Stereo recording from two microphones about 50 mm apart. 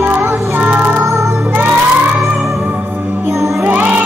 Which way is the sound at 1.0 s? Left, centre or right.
Right.